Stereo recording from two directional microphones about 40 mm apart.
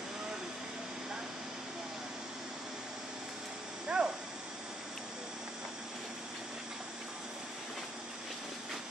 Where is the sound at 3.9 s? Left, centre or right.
Centre.